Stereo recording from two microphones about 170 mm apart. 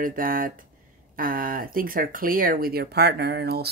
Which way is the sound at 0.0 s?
55° right (ahead or behind).